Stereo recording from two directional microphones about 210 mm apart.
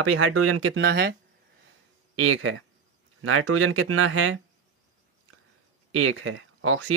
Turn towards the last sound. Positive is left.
turn(degrees=-85)